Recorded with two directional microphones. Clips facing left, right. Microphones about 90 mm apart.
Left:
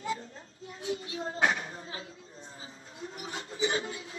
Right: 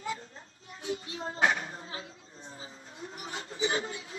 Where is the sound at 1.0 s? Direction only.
30° right (ahead or behind).